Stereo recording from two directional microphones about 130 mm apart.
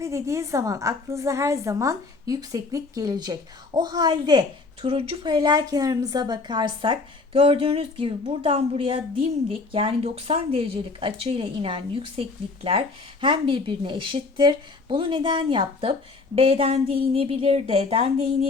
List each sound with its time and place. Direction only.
0.0 s a woman's voice: 25° right (ahead or behind); by 12.2 s 45° right (ahead or behind)
13.2 s a woman's voice: 40° right (ahead or behind)